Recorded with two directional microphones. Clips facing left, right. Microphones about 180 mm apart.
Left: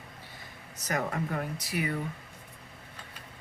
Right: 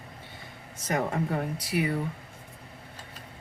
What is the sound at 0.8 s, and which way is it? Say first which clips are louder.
Speech: right 3 dB; 30° right (ahead or behind).